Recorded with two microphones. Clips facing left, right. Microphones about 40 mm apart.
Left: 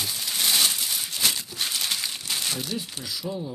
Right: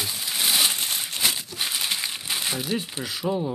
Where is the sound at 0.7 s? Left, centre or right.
Right.